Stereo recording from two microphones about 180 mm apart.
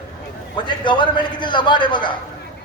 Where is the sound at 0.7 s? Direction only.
25° left (ahead or behind).